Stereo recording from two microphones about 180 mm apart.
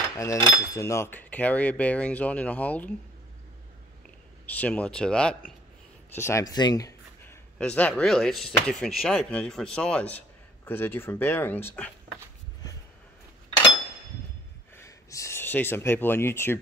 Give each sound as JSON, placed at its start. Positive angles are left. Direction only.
{"t": 0.2, "sound": "speech", "side_deg": 20}
{"t": 4.5, "sound": "speech", "side_deg": 10}
{"t": 6.1, "sound": "speech", "side_deg": 15}
{"t": 7.5, "sound": "speech", "side_deg": 5}
{"t": 14.8, "sound": "speech", "side_deg": 20}